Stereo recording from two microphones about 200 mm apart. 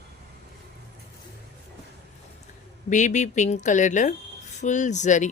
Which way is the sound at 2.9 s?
35° left (ahead or behind).